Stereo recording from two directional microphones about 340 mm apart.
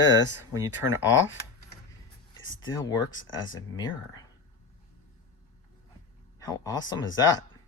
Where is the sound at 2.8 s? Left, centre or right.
Centre.